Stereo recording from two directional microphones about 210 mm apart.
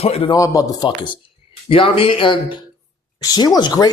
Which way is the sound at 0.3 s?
15° left (ahead or behind).